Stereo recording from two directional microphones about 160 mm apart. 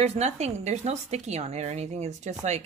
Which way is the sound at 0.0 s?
40° right (ahead or behind).